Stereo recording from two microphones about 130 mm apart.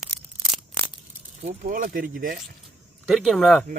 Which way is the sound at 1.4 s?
90° right.